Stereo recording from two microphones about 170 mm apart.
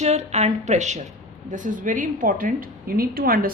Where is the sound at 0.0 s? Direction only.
40° right (ahead or behind).